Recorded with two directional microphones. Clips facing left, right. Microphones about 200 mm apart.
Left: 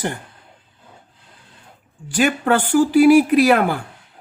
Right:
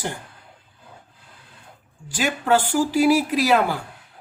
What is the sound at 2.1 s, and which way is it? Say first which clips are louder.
Speech: left 3 dB; 60° left (ahead or behind).